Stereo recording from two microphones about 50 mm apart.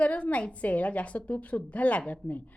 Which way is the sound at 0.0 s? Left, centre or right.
Left.